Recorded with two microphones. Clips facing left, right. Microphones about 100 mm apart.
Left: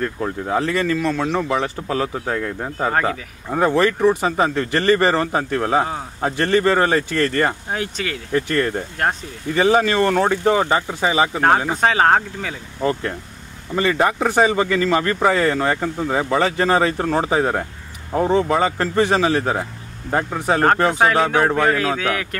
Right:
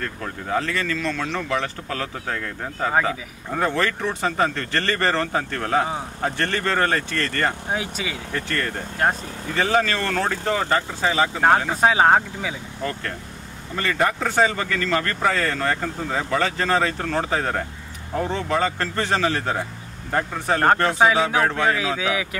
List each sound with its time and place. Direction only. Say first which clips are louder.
0.0 s speech: left 7 dB; 15° left (ahead or behind)
2.9 s speech: left 1 dB; centre (ahead or behind)
3.4 s speech: left 6 dB; 15° left (ahead or behind)
7.7 s speech: left 2 dB; 5° right (ahead or behind)
8.3 s speech: left 9 dB; 10° left (ahead or behind)
13.7 s speech: left 4 dB; 15° left (ahead or behind)
21.0 s speech: left 2 dB; centre (ahead or behind)